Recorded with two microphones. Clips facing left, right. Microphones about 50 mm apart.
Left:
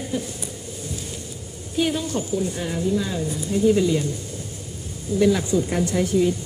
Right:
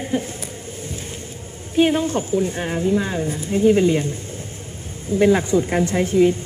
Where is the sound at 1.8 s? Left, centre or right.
Right.